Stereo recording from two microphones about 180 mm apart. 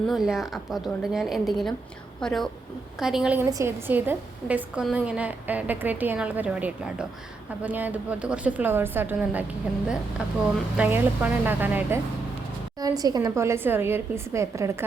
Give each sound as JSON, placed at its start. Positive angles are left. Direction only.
{"t": 0.1, "sound": "a woman's voice", "side_deg": 0}